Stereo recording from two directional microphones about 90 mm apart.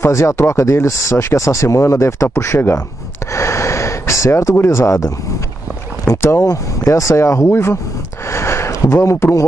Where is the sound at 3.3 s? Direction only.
30° left (ahead or behind).